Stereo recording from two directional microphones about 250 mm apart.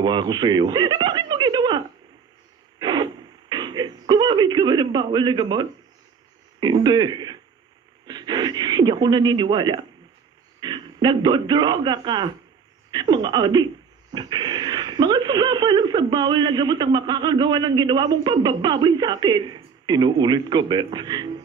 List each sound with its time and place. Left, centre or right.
0.0 s a sound: centre
2.8 s radio: centre
6.6 s a man's voice: centre